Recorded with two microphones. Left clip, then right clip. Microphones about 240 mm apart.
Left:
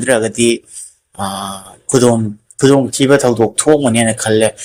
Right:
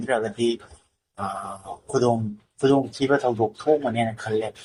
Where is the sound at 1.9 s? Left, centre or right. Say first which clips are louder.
Left 10 dB; left.